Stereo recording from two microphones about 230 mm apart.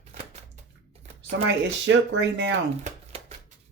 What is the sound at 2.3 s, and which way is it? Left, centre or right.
Speech, right.